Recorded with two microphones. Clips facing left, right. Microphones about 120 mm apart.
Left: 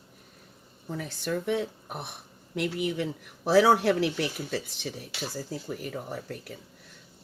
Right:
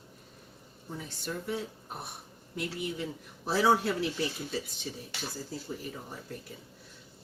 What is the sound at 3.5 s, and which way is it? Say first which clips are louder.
Speech: left 6 dB; 90° left.